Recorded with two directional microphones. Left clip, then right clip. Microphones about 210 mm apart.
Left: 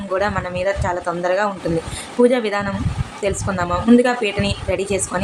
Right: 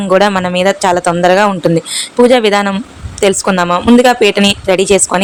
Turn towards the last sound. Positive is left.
turn(degrees=-45)  # may be behind; listen again after turning